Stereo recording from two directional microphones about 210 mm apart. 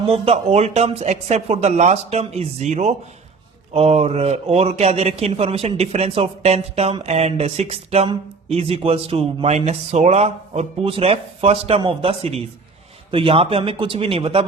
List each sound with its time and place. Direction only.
0.0 s a man's voice: 30° right (ahead or behind)